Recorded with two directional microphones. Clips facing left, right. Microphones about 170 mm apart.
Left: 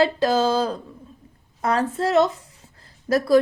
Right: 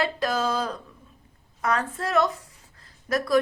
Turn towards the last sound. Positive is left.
turn(degrees=30)  # may be behind; listen again after turning